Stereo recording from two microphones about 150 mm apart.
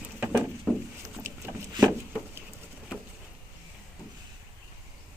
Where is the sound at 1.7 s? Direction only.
25° right (ahead or behind).